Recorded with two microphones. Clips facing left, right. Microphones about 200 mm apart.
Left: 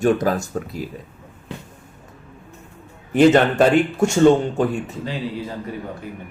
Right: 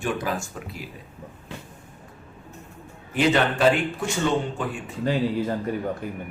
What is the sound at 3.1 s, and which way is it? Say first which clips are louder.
Speech: left 8 dB; 45° left (ahead or behind).